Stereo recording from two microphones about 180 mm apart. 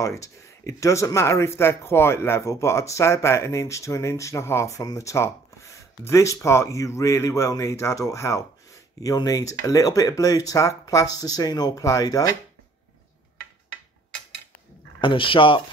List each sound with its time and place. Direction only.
0.0 s speech: 15° left (ahead or behind)
15.0 s speech: 30° left (ahead or behind)